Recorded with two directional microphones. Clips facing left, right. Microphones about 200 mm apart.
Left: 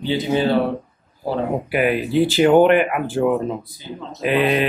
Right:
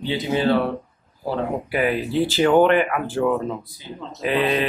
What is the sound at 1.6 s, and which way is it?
Speech, 15° left (ahead or behind).